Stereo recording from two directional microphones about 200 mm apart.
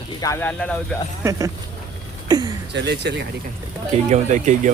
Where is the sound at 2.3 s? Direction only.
20° right (ahead or behind).